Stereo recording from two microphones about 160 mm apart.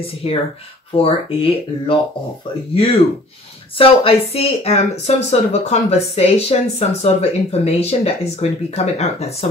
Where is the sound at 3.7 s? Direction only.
35° left (ahead or behind).